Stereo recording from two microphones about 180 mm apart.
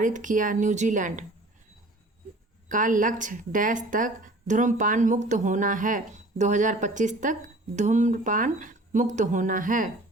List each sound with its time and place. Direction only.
0.0 s speech: 45° right (ahead or behind)
2.6 s speech: 45° right (ahead or behind)